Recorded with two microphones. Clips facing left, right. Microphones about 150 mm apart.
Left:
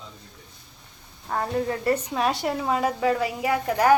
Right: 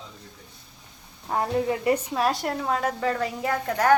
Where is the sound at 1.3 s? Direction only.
15° right (ahead or behind).